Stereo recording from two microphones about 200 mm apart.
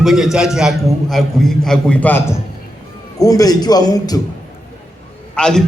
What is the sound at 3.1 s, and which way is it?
A man's voice, 20° left (ahead or behind).